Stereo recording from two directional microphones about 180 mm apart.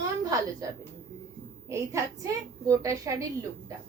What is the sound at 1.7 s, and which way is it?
A woman's voice, 15° right (ahead or behind).